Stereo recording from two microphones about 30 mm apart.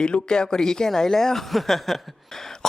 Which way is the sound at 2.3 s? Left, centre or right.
Centre.